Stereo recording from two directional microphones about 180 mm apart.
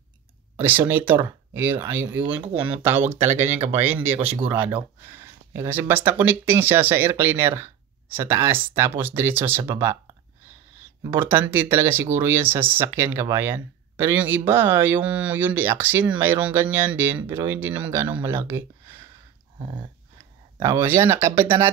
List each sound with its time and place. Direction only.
0.6 s speech: 10° right (ahead or behind)
11.1 s speech: 10° right (ahead or behind)
19.6 s dog: 25° right (ahead or behind)
20.5 s speech: 15° right (ahead or behind)